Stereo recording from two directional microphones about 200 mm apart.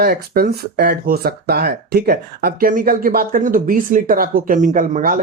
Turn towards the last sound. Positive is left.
turn(degrees=-45)  # may be behind; listen again after turning